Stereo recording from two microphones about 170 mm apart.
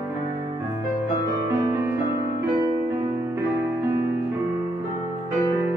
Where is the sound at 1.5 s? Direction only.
15° right (ahead or behind).